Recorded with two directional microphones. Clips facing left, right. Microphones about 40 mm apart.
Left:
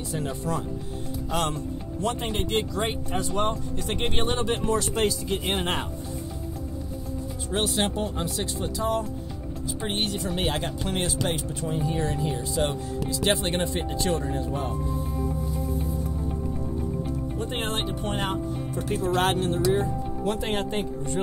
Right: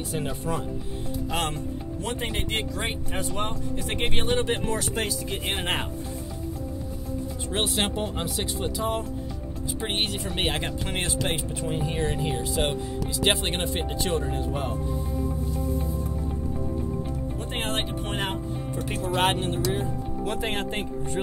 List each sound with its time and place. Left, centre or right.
0.3 s speech: right
7.7 s speech: right
18.0 s speech: right